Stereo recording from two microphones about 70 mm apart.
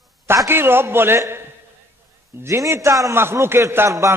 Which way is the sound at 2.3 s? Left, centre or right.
Right.